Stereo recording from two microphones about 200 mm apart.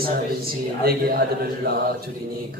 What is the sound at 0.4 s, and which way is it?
Speech, 50° right (ahead or behind).